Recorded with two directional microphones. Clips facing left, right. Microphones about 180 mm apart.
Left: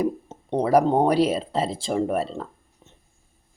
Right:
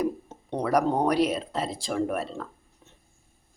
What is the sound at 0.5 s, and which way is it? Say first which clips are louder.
Speech: left 5 dB; 30° left (ahead or behind).